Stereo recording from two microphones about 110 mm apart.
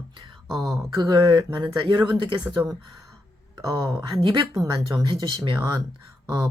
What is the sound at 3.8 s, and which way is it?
Speech, 45° right (ahead or behind).